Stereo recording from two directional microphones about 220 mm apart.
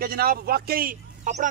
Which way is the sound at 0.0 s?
40° right (ahead or behind).